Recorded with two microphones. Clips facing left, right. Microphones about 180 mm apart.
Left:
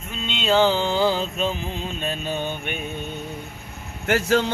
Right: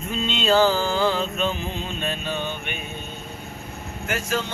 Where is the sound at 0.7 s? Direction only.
25° left (ahead or behind).